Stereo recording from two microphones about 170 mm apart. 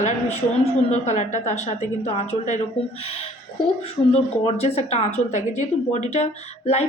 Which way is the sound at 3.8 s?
35° left (ahead or behind).